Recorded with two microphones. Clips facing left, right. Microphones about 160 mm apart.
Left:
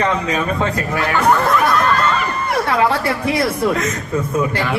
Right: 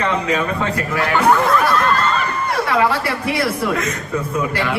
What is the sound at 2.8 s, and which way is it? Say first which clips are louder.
A man's voice: left 1 dB; 25° left (ahead or behind).